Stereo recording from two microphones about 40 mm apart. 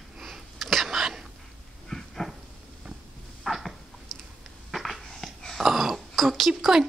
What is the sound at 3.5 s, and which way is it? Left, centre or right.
Dog, centre.